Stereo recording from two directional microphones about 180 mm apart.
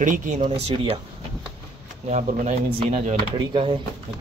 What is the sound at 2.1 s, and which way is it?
Speech, 40° right (ahead or behind).